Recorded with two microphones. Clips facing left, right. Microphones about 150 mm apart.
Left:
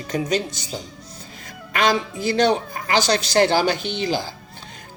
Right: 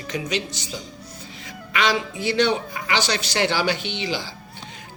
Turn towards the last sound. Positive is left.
turn(degrees=45)  # may be behind; listen again after turning